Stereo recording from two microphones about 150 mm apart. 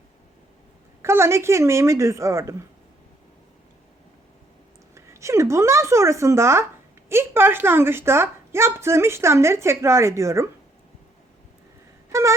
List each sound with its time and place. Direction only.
1.0 s speech: 15° right (ahead or behind)
4.9 s a woman's voice: 20° right (ahead or behind)